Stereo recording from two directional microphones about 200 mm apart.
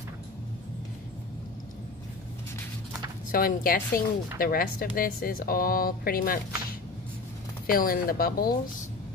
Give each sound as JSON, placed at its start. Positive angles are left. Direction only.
{"t": 3.3, "sound": "a woman's voice", "side_deg": 45}
{"t": 7.6, "sound": "a woman's voice", "side_deg": 45}